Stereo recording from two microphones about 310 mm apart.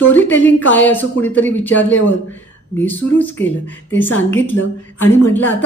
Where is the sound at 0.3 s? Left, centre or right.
Centre.